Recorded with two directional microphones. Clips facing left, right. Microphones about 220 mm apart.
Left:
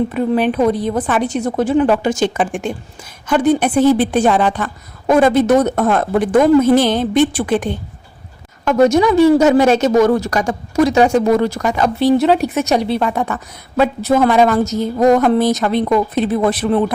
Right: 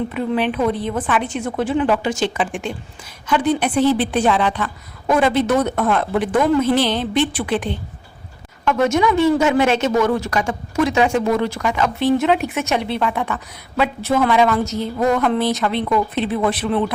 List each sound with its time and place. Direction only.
0.1 s a woman's voice: 45° left (ahead or behind)